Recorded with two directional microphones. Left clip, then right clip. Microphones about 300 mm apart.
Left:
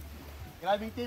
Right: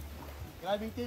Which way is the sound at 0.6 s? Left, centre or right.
Left.